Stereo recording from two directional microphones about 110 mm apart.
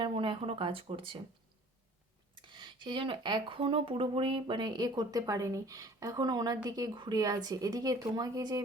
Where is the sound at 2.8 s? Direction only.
50° right (ahead or behind).